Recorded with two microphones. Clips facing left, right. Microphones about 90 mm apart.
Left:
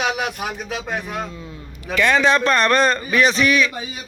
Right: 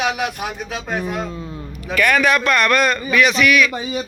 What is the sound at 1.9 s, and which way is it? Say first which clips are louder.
A man's voice: even; 25° left (ahead or behind).